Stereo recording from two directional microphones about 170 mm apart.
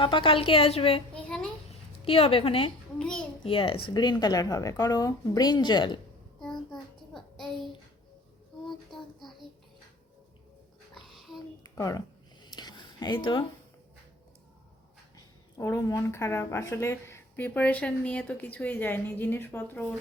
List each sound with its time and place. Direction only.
0.0 s a woman's voice: 30° left (ahead or behind)
1.1 s a sound: 5° left (ahead or behind)
2.0 s a woman's voice: 35° left (ahead or behind)
3.0 s a sound: 5° left (ahead or behind)
3.4 s speech: 30° left (ahead or behind)
6.4 s child singing: 5° left (ahead or behind)
8.9 s child singing: centre (ahead or behind)
11.6 s a sound: 20° left (ahead or behind)
15.5 s speech: 20° left (ahead or behind)